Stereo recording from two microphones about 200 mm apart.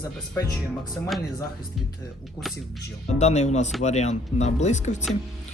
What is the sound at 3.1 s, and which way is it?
Speech, 35° left (ahead or behind).